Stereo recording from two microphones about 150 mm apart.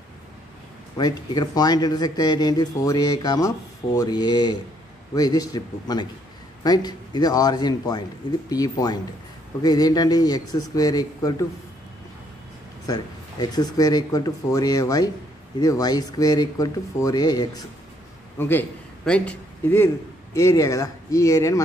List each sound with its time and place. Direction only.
0.9 s speech: 30° left (ahead or behind)
12.8 s speech: 25° left (ahead or behind)
18.4 s a man's voice: 10° left (ahead or behind)